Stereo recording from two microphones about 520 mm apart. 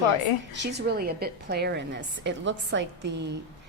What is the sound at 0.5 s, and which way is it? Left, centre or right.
A woman's voice, centre.